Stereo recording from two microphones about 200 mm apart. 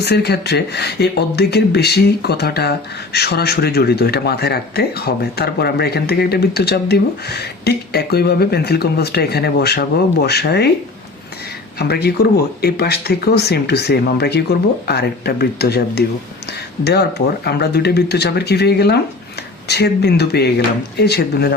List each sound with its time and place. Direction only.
0.0 s speech: 55° left (ahead or behind)
11.8 s speech: 55° left (ahead or behind)